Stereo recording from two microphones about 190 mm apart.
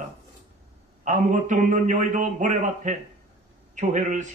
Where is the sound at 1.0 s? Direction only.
40° right (ahead or behind).